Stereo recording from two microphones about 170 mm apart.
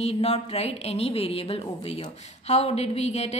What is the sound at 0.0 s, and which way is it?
A woman's voice, 40° left (ahead or behind).